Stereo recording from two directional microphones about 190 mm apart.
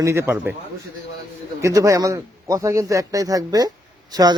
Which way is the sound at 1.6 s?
15° right (ahead or behind).